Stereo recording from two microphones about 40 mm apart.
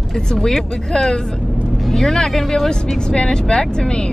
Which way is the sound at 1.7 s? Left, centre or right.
Centre.